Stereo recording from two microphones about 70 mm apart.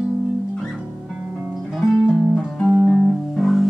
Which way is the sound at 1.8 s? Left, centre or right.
Centre.